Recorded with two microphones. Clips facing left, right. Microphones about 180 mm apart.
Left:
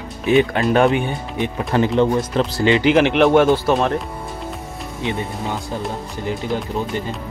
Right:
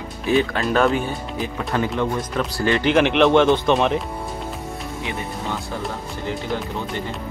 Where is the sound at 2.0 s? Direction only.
30° left (ahead or behind).